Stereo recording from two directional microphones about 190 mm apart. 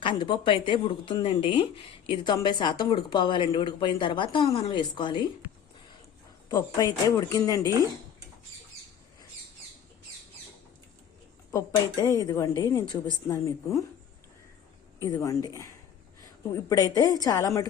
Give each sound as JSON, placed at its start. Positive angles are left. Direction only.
{"t": 0.0, "sound": "a woman's voice", "side_deg": 25}
{"t": 6.5, "sound": "a woman's voice", "side_deg": 20}
{"t": 11.5, "sound": "a woman's voice", "side_deg": 20}
{"t": 15.0, "sound": "a woman's voice", "side_deg": 15}
{"t": 16.6, "sound": "a woman's voice", "side_deg": 20}